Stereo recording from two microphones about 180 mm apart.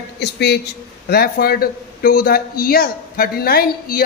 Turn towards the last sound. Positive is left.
turn(degrees=55)  # may be behind; listen again after turning